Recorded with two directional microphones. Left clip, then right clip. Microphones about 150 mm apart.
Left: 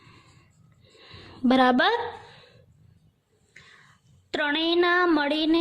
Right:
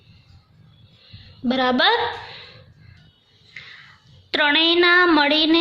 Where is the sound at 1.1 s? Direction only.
75° left (ahead or behind); by 2.0 s 55° left (ahead or behind).